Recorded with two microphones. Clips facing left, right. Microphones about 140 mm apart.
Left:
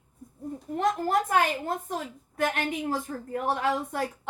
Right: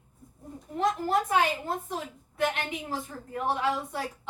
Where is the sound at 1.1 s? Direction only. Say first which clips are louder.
Even; 50° left (ahead or behind).